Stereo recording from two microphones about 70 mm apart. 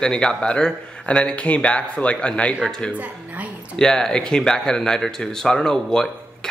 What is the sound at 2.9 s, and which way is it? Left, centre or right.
Speech, right.